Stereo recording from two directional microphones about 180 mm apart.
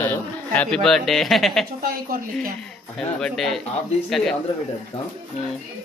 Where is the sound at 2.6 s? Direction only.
5° left (ahead or behind).